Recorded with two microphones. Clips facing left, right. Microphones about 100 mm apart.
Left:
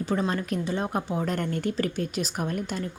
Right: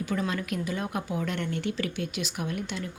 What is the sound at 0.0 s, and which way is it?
A woman's voice, 35° left (ahead or behind).